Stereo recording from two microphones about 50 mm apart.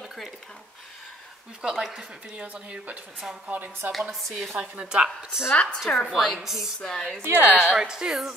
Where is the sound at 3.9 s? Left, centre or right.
Centre.